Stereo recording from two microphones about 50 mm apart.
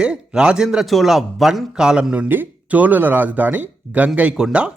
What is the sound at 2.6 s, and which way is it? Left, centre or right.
Speech, right.